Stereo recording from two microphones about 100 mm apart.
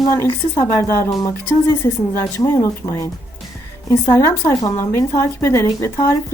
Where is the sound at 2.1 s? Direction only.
30° left (ahead or behind).